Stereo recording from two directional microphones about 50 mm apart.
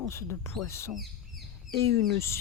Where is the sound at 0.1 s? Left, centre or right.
Left.